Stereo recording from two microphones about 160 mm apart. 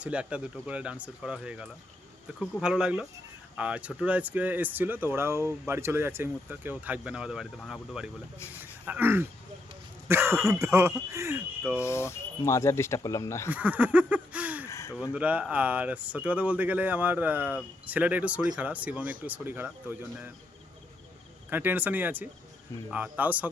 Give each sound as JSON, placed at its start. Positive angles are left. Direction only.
{"t": 0.0, "sound": "speech", "side_deg": -5}
{"t": 11.8, "sound": "speech", "side_deg": 15}
{"t": 13.5, "sound": "a sound", "side_deg": -10}
{"t": 14.7, "sound": "gasp", "side_deg": 20}
{"t": 15.1, "sound": "speech", "side_deg": -10}
{"t": 21.5, "sound": "speech", "side_deg": -10}